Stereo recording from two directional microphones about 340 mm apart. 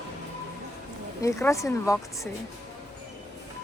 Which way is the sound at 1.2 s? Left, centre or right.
Centre.